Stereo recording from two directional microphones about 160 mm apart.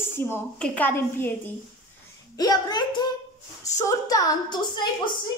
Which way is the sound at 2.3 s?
25° left (ahead or behind).